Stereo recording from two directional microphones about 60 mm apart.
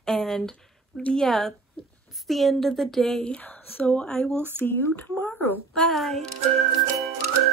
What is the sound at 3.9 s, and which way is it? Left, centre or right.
Speech, centre.